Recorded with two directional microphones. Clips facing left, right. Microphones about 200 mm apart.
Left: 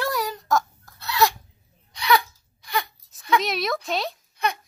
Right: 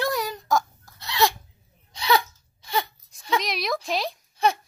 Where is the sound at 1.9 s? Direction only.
30° right (ahead or behind).